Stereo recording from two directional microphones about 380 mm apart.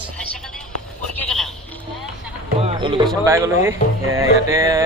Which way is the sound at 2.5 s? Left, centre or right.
Centre.